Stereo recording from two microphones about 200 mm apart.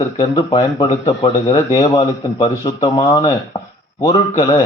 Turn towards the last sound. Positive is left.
turn(degrees=25)  # may be behind; listen again after turning